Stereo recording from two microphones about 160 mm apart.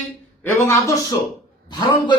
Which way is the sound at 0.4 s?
15° left (ahead or behind).